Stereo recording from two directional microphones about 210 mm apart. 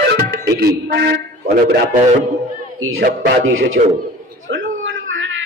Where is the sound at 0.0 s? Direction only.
50° right (ahead or behind).